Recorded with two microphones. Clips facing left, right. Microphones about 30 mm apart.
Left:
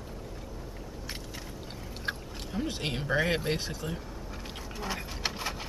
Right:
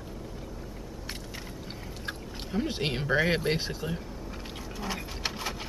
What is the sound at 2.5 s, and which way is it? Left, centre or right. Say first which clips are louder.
Speech: right 3 dB; centre.